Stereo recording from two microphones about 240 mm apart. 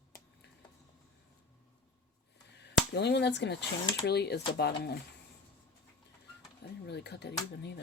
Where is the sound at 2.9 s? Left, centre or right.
Left.